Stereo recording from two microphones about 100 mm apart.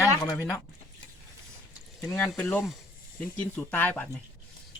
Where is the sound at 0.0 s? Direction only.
30° left (ahead or behind).